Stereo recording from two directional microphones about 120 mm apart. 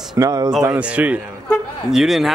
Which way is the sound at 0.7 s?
10° right (ahead or behind).